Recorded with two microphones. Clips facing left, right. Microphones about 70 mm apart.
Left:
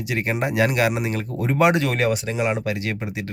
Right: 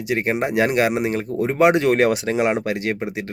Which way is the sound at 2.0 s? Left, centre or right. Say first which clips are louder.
Right 4 dB; right.